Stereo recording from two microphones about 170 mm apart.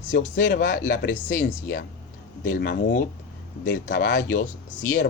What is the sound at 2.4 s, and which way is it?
Speech, 55° left (ahead or behind).